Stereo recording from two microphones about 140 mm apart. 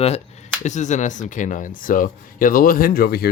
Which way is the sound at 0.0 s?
50° left (ahead or behind).